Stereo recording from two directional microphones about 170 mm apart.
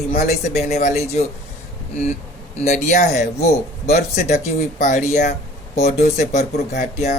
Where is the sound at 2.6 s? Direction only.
45° left (ahead or behind).